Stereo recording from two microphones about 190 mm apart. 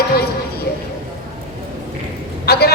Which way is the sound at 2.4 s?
55° left (ahead or behind).